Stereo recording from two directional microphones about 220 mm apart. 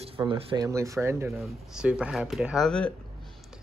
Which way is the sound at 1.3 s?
Centre (ahead or behind).